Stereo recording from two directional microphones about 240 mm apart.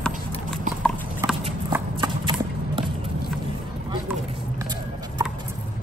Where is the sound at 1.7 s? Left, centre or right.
Centre.